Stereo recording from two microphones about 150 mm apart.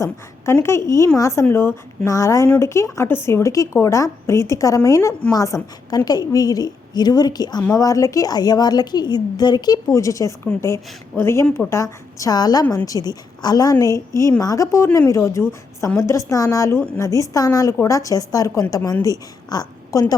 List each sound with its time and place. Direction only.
0.0 s a woman's voice: 20° left (ahead or behind)